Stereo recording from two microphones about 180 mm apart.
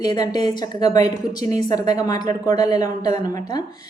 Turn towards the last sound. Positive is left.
turn(degrees=20)  # may be behind; listen again after turning